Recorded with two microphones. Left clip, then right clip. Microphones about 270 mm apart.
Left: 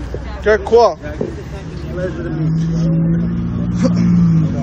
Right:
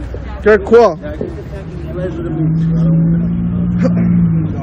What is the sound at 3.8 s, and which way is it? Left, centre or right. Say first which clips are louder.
Vehicle: right 1 dB; centre.